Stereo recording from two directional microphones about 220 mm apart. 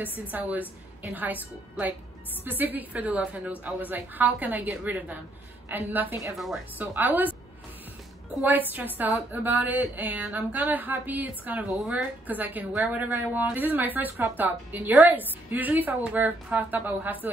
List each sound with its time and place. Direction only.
0.0 s a woman's voice: 10° right (ahead or behind)
8.4 s a woman's voice: 10° right (ahead or behind)